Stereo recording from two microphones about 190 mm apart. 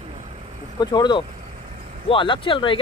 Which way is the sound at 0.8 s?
20° left (ahead or behind).